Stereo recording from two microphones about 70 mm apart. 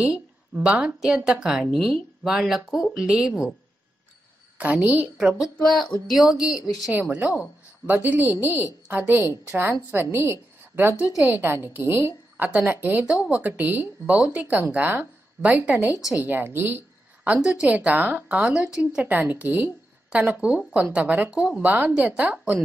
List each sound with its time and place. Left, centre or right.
0.0 s a woman's voice: centre
4.6 s a woman's voice: right
5.6 s speech: centre
6.9 s a woman's voice: right
12.4 s a woman's voice: centre
13.1 s a woman's voice: centre
13.4 s a woman's voice: right
19.0 s a woman's voice: right